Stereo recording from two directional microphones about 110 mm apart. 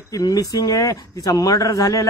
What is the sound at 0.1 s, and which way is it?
Speech, 35° left (ahead or behind).